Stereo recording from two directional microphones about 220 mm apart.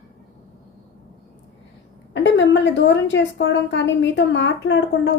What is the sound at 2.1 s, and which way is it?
A woman's voice, 55° left (ahead or behind).